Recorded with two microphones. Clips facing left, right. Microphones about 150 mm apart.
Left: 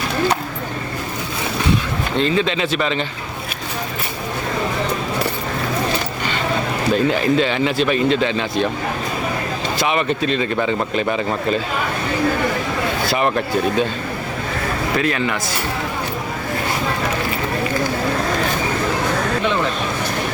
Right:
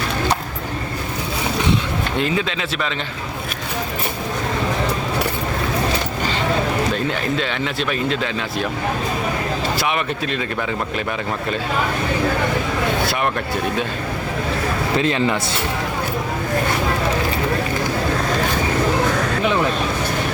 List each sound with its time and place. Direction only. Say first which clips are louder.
2.1 s speech: left 5 dB; 10° right (ahead or behind)
6.9 s speech: left 5 dB; 5° left (ahead or behind)
9.7 s speech: left 3 dB; centre (ahead or behind)
13.1 s speech: left 3 dB; centre (ahead or behind)
14.9 s speech: right 2 dB; 25° right (ahead or behind)